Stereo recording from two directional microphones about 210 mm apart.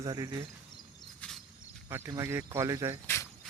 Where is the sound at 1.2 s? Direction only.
Centre (ahead or behind).